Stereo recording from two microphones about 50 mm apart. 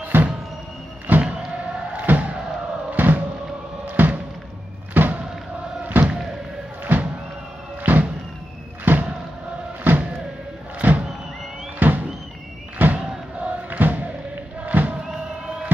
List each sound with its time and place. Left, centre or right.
0.0 s music: right
1.1 s a sound: right
2.0 s music: right
3.9 s slam: right
5.9 s a sound: right
6.8 s music: right
8.9 s vehicle: right
9.9 s music: right
11.8 s a sound: right
13.4 s crowd: right
14.6 s music: right